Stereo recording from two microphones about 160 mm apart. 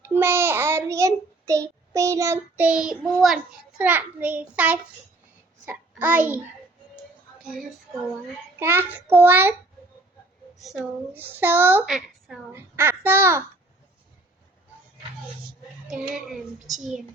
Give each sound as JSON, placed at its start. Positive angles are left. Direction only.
{"t": 0.0, "sound": "child singing", "side_deg": -15}
{"t": 1.9, "sound": "a child's voice", "side_deg": -20}
{"t": 7.4, "sound": "speech", "side_deg": 0}
{"t": 8.5, "sound": "a child's voice", "side_deg": -15}
{"t": 11.1, "sound": "a child's voice", "side_deg": -10}
{"t": 11.9, "sound": "a woman's voice", "side_deg": -5}
{"t": 12.5, "sound": "a child's voice", "side_deg": -15}
{"t": 16.0, "sound": "speech", "side_deg": -5}